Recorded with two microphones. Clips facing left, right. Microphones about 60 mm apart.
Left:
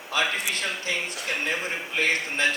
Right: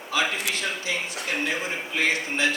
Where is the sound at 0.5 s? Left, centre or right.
Left.